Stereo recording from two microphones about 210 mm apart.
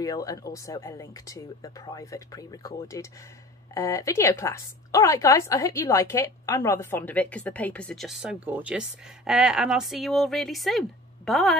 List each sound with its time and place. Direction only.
0.0 s a woman's voice: 15° left (ahead or behind); by 11.5 s centre (ahead or behind)